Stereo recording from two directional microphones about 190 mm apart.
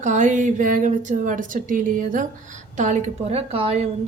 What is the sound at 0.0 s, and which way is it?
A woman's voice, 40° right (ahead or behind).